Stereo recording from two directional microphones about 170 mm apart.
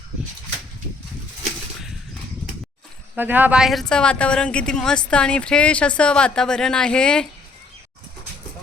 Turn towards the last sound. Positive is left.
turn(degrees=5)  # may be behind; listen again after turning